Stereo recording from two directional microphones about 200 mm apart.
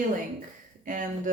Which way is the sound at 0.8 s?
40° right (ahead or behind).